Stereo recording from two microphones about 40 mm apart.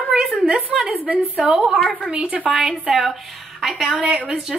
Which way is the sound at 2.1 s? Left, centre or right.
Right.